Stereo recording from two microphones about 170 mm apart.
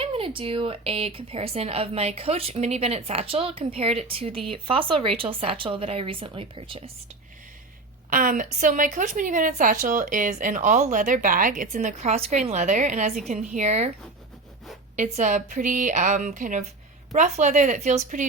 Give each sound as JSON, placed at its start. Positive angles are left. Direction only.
{"t": 0.0, "sound": "speech", "side_deg": -35}
{"t": 8.1, "sound": "a woman's voice", "side_deg": -50}
{"t": 14.9, "sound": "a woman's voice", "side_deg": -45}